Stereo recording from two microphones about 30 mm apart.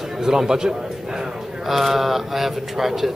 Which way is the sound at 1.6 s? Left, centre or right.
Centre.